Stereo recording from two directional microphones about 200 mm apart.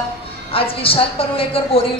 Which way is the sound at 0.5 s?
25° left (ahead or behind).